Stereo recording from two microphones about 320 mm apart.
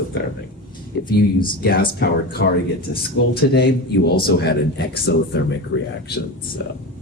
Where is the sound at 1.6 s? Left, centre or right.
Left.